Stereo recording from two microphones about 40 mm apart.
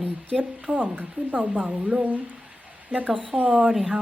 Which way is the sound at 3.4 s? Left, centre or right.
Right.